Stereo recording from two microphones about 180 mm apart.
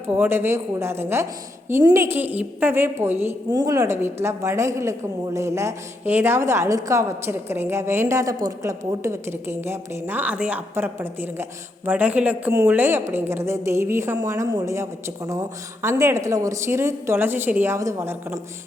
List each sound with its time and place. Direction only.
0.1 s a woman's voice: 10° right (ahead or behind)